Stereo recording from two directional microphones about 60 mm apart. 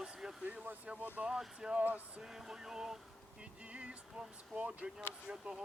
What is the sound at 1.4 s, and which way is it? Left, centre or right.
Speech, centre.